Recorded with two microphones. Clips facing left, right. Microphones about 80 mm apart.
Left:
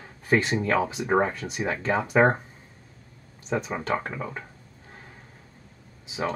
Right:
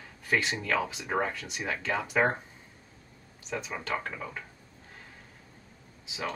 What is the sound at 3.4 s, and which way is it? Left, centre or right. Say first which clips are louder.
Speech: left 7 dB; left.